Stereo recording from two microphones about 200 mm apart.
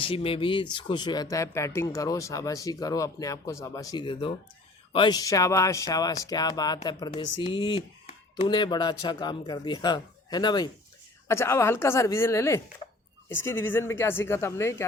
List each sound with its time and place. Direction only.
0.0 s speech: 25° left (ahead or behind)